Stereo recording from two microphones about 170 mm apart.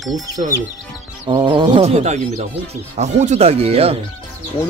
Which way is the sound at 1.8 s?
40° right (ahead or behind).